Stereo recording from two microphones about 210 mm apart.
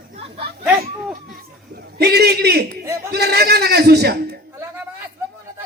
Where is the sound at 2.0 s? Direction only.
50° right (ahead or behind).